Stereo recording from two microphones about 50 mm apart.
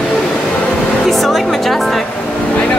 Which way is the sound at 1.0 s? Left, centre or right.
Centre.